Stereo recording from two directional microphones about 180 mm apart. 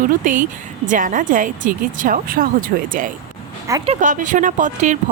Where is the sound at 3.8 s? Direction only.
40° right (ahead or behind).